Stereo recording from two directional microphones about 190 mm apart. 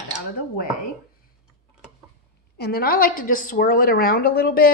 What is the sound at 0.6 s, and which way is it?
Speech, 50° left (ahead or behind).